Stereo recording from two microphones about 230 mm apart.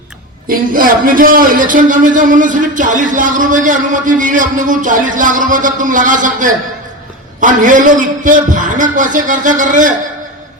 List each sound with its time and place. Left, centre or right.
0.4 s a man's voice: right